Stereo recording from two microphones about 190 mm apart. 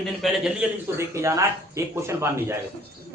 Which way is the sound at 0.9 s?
15° right (ahead or behind).